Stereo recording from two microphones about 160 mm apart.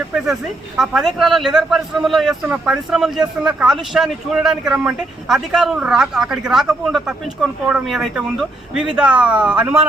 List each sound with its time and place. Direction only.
0.3 s a man's voice: centre (ahead or behind)